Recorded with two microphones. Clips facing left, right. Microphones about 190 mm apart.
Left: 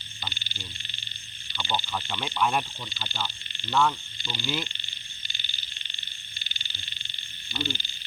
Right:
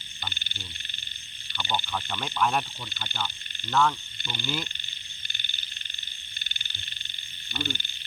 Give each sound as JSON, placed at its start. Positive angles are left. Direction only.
{"t": 1.5, "sound": "speech", "side_deg": 0}
{"t": 5.3, "sound": "frog", "side_deg": -55}
{"t": 7.6, "sound": "speech", "side_deg": -55}